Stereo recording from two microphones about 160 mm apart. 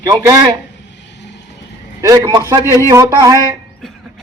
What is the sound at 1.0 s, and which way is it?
Vehicle, 90° left.